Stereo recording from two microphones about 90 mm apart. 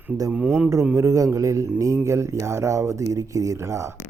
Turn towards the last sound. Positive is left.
turn(degrees=-35)  # may be behind; listen again after turning